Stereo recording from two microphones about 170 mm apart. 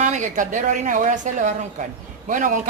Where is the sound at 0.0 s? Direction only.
45° right (ahead or behind).